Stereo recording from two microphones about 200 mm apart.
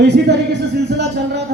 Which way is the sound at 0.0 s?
55° right (ahead or behind).